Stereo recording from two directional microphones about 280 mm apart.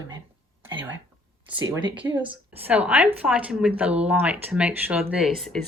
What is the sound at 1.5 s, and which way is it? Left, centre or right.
Speech, centre.